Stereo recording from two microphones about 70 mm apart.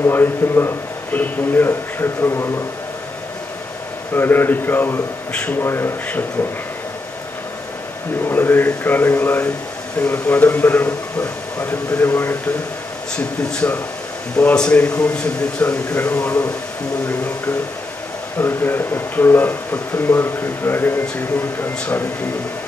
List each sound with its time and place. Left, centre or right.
0.0 s speech: left
4.1 s speech: left
8.3 s speech: left
13.1 s a man's voice: centre
18.4 s speech: left